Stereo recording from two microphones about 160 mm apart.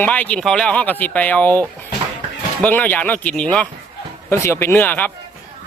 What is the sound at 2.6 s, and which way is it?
Speech, 10° left (ahead or behind).